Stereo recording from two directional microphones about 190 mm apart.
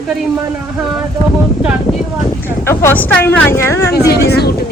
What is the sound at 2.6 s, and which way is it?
Speech, 10° left (ahead or behind).